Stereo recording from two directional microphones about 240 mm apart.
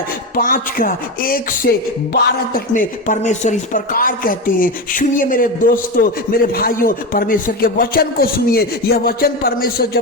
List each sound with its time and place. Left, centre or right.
0.3 s speech: left